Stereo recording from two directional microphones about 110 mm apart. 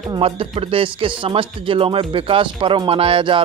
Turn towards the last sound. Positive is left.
turn(degrees=-50)  # may be behind; listen again after turning